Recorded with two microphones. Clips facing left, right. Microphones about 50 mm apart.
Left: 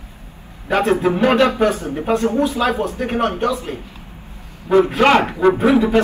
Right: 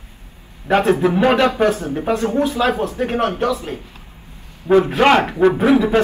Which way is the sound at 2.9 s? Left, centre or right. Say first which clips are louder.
Even; left.